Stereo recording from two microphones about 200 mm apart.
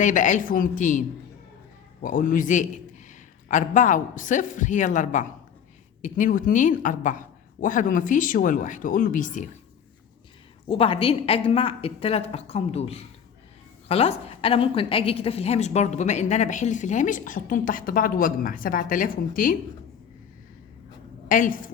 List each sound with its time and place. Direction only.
0.0 s a woman's voice: 40° left (ahead or behind)
10.7 s a woman's voice: 25° left (ahead or behind); by 19.5 s 45° left (ahead or behind)
21.2 s a woman's voice: 40° left (ahead or behind)